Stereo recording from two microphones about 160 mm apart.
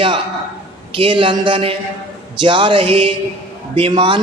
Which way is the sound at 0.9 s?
30° right (ahead or behind).